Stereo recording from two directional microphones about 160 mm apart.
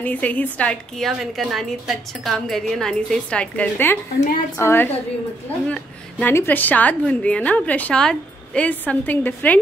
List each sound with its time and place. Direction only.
0.0 s a woman's voice: 10° left (ahead or behind)